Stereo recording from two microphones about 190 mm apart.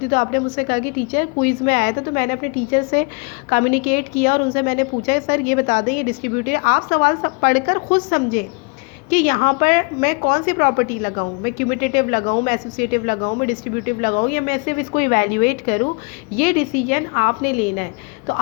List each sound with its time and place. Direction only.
0.0 s a woman's voice: 45° left (ahead or behind)